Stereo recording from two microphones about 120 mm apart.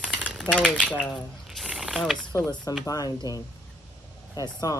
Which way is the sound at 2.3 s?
25° left (ahead or behind).